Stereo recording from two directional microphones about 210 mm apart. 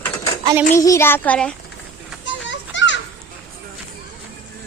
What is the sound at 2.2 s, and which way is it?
Children playing, 60° left (ahead or behind).